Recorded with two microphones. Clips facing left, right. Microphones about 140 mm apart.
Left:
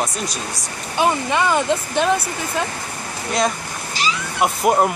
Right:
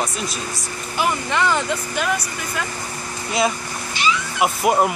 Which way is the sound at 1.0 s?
20° left (ahead or behind).